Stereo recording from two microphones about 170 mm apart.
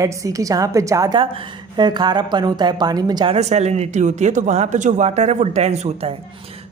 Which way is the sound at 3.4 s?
40° right (ahead or behind).